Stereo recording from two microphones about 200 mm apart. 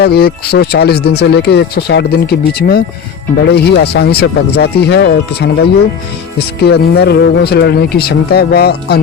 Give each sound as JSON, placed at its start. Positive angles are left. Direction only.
{"t": 0.0, "sound": "speech", "side_deg": 50}
{"t": 6.6, "sound": "speech", "side_deg": 55}